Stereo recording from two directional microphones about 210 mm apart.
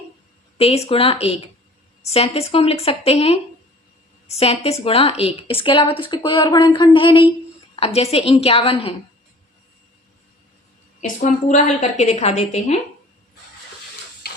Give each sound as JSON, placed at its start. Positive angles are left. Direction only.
{"t": 0.6, "sound": "a woman's voice", "side_deg": 30}
{"t": 11.0, "sound": "a woman's voice", "side_deg": 35}